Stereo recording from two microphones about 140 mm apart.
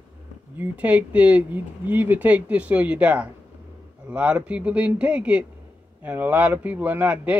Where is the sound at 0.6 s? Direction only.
10° right (ahead or behind).